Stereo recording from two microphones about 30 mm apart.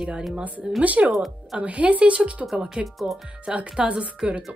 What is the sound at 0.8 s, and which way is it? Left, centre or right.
Speech, right.